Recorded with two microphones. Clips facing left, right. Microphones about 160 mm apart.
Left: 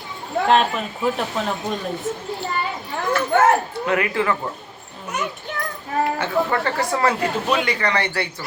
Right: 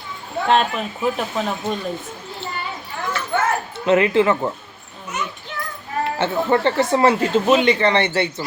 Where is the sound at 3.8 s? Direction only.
25° right (ahead or behind).